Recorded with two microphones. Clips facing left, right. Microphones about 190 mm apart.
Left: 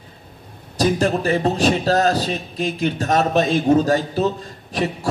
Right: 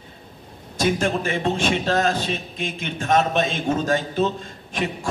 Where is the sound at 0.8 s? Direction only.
35° left (ahead or behind).